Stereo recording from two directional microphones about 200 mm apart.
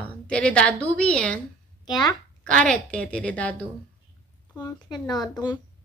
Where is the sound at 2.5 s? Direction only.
5° left (ahead or behind).